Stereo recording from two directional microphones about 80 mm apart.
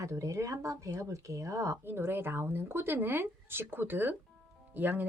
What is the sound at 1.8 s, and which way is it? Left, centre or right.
Speech, right.